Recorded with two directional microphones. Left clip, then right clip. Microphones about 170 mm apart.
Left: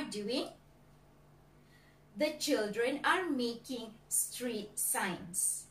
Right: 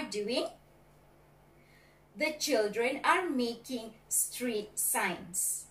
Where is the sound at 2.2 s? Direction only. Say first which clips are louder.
Right 3 dB; 15° left (ahead or behind).